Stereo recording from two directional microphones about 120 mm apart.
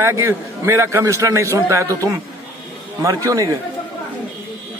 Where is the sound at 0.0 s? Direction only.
25° right (ahead or behind).